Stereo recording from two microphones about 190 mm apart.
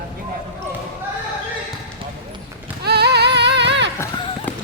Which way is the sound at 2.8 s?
60° right (ahead or behind).